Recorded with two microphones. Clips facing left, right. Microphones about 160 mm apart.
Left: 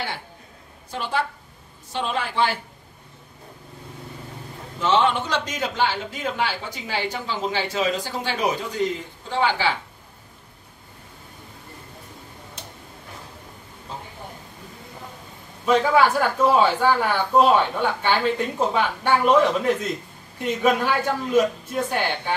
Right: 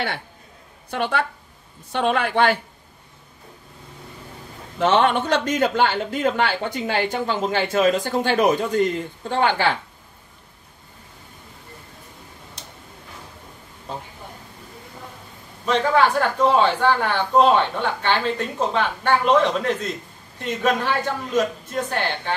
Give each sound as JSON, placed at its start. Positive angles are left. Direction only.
{"t": 0.8, "sound": "speech", "side_deg": -65}
{"t": 4.7, "sound": "a woman's voice", "side_deg": -60}
{"t": 15.6, "sound": "speech", "side_deg": 5}